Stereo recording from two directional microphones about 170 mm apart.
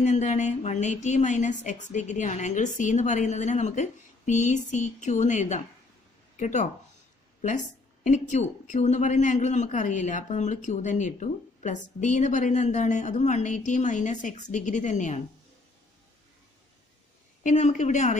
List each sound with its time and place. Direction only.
0.0 s a woman's voice: 45° left (ahead or behind)
17.4 s a woman's voice: 45° left (ahead or behind)